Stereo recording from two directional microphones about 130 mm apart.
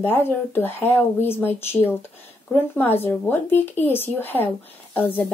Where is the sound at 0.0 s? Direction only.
15° left (ahead or behind).